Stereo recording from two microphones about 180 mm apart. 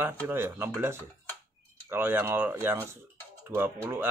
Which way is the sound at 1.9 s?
10° right (ahead or behind).